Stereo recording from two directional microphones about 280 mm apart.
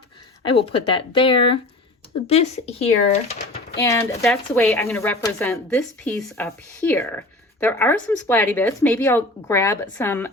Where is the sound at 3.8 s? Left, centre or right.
Centre.